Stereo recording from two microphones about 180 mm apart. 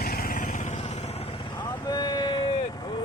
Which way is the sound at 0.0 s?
55° left (ahead or behind).